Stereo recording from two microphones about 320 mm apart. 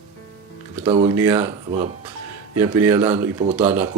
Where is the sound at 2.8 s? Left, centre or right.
Centre.